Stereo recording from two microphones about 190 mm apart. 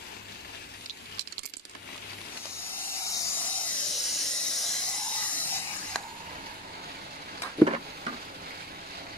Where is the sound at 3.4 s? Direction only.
5° left (ahead or behind).